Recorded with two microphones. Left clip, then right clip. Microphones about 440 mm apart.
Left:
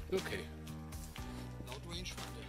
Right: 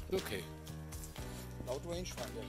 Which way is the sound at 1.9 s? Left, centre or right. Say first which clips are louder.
Right 3 dB; centre.